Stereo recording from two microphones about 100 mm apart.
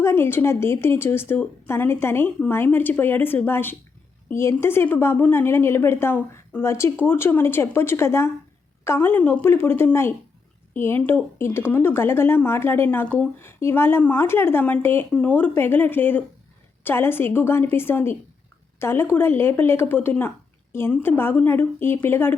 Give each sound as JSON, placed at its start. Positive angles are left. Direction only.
{"t": 0.0, "sound": "a woman's voice", "side_deg": 25}